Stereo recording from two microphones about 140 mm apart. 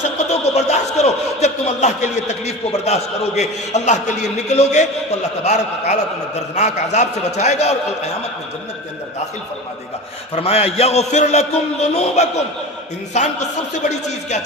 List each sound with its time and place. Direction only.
0.3 s a man's voice: 50° left (ahead or behind)
10.3 s a man's voice: 45° left (ahead or behind)